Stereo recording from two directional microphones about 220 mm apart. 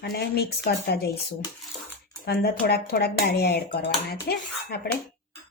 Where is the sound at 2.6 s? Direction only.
45° left (ahead or behind).